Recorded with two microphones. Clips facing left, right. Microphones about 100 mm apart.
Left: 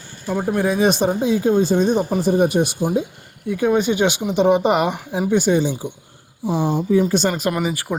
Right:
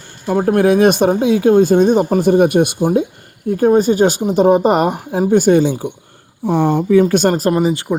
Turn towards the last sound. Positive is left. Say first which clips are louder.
# right 7 dB
turn(degrees=-30)  # may be behind; listen again after turning